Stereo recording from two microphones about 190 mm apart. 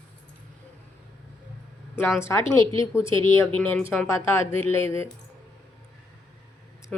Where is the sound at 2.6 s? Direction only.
25° right (ahead or behind).